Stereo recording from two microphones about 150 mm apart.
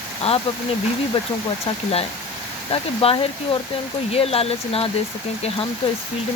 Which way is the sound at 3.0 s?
40° left (ahead or behind).